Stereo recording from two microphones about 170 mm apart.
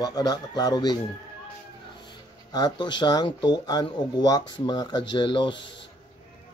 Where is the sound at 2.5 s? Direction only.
25° left (ahead or behind).